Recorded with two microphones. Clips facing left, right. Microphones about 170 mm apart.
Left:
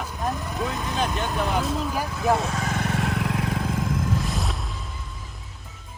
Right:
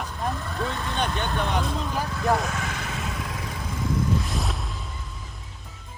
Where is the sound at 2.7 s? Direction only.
65° left (ahead or behind).